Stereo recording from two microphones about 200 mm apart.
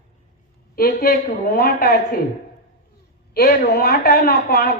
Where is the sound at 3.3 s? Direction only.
50° left (ahead or behind).